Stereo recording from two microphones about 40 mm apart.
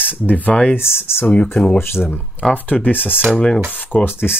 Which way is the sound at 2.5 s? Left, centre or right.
Left.